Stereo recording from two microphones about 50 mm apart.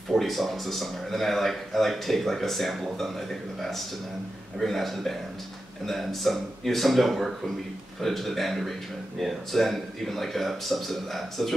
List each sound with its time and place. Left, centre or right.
0.1 s speech: centre